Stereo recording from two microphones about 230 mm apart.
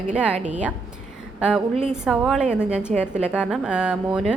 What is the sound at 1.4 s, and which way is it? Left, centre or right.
A woman's voice, centre.